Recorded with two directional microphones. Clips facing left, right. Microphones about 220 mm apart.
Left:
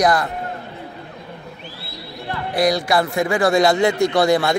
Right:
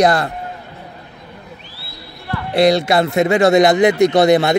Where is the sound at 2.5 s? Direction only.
25° right (ahead or behind).